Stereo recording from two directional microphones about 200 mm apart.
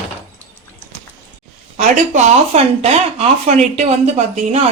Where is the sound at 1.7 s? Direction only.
35° right (ahead or behind).